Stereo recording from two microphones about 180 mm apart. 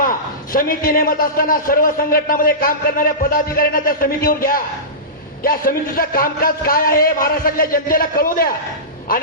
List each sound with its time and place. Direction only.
0.0 s a man's voice: 50° left (ahead or behind)